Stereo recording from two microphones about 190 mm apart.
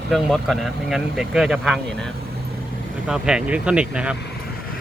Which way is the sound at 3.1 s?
5° right (ahead or behind).